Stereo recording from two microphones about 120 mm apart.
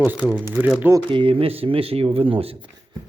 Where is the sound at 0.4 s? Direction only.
20° right (ahead or behind).